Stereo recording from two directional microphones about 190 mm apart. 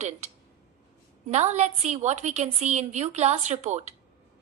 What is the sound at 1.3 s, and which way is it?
A woman's voice, 35° right (ahead or behind).